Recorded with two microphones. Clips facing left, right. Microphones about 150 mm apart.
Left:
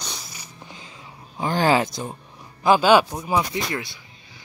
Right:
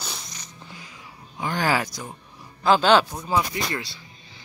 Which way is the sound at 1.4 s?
30° left (ahead or behind).